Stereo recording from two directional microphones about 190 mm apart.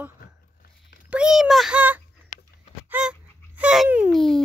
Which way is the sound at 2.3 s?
40° left (ahead or behind).